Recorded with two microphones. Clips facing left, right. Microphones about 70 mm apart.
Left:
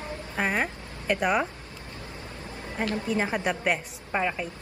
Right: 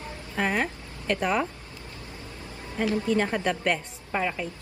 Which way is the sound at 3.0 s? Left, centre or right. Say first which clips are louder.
Even; centre.